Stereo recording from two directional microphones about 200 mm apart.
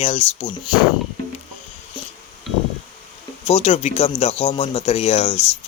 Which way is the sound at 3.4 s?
30° left (ahead or behind).